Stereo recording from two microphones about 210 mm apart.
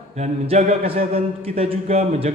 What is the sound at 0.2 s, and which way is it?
A man's voice, 30° right (ahead or behind).